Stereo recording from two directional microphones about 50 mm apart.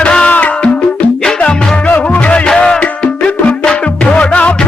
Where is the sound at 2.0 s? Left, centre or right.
Left.